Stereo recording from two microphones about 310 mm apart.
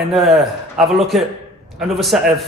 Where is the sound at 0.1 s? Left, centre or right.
Centre.